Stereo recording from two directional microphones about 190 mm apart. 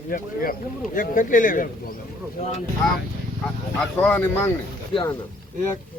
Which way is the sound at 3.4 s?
5° left (ahead or behind).